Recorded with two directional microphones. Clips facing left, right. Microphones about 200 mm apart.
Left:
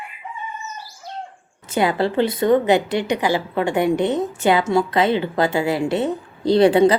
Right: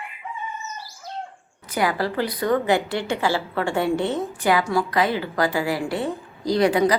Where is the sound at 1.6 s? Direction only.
25° left (ahead or behind).